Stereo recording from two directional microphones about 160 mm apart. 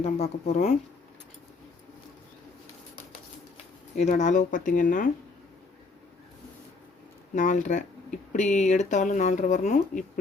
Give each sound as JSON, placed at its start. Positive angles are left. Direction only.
{"t": 0.0, "sound": "speech", "side_deg": 45}
{"t": 3.9, "sound": "speech", "side_deg": 45}
{"t": 7.3, "sound": "speech", "side_deg": 50}